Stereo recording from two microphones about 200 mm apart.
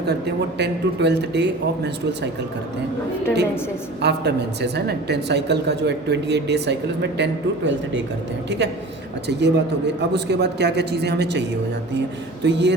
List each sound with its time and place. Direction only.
0.1 s speech: 55° right (ahead or behind)
4.0 s speech: 55° right (ahead or behind)
12.5 s speech: 60° right (ahead or behind)